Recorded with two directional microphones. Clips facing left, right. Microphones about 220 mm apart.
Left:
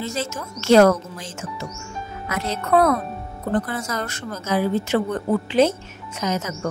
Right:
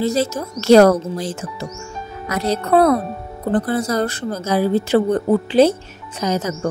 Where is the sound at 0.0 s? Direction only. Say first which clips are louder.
Right 9 dB; 35° right (ahead or behind).